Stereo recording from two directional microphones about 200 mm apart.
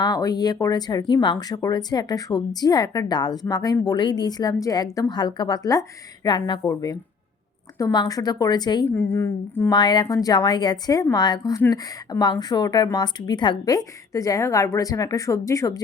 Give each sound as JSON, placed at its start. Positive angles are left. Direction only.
{"t": 0.0, "sound": "a woman's voice", "side_deg": 20}